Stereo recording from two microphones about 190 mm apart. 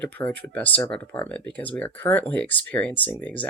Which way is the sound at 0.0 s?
5° left (ahead or behind).